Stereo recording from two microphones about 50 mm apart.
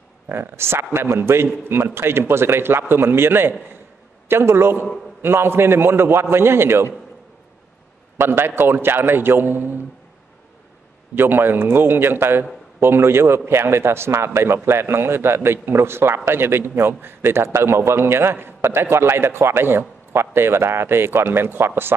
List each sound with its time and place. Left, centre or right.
0.3 s a man's voice: right
8.2 s a man's voice: right
11.1 s a man's voice: right